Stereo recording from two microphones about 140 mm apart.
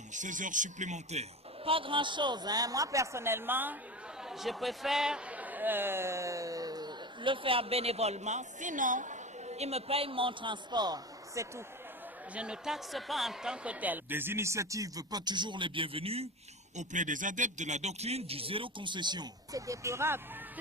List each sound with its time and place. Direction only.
0.1 s a man's voice: 65° right (ahead or behind); by 3.8 s 15° right (ahead or behind)
4.3 s a man's voice: centre (ahead or behind); by 11.6 s 25° right (ahead or behind)
12.3 s speech: 5° right (ahead or behind); by 16.3 s 45° right (ahead or behind)
16.7 s a man's voice: 60° right (ahead or behind); by 20.2 s 20° right (ahead or behind)